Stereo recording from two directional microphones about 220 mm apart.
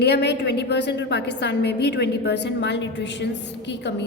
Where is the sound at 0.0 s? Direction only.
50° left (ahead or behind).